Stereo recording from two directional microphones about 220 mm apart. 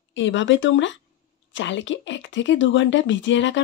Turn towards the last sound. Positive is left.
turn(degrees=55)  # may be behind; listen again after turning